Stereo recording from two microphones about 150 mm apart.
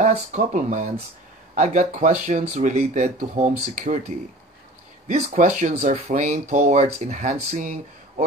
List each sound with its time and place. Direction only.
0.0 s speech: 50° right (ahead or behind)
5.0 s speech: 55° right (ahead or behind)